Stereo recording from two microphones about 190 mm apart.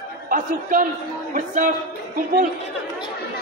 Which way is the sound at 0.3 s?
45° right (ahead or behind).